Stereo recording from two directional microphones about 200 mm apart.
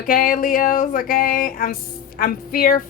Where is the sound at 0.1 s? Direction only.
45° left (ahead or behind).